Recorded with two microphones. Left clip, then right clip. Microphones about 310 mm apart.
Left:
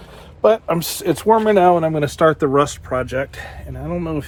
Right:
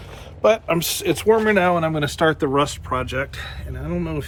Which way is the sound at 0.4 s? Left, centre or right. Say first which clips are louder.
Left 2 dB; centre.